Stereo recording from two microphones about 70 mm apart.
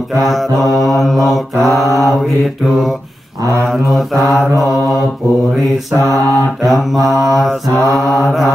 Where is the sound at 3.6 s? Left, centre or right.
Centre.